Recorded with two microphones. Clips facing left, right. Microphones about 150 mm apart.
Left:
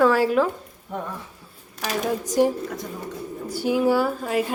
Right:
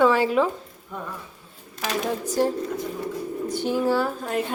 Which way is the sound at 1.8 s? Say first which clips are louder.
Left 1 dB; 5° left (ahead or behind).